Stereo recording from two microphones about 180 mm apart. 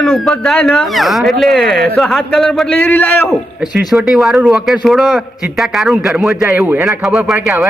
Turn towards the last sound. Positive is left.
turn(degrees=0)  # may be behind; listen again after turning